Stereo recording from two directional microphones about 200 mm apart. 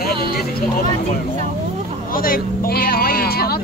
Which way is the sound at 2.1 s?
45° left (ahead or behind).